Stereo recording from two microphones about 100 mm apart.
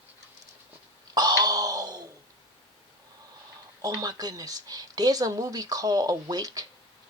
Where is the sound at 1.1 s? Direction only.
40° right (ahead or behind).